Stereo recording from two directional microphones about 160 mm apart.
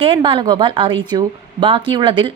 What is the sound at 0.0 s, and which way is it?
Speech, 35° right (ahead or behind).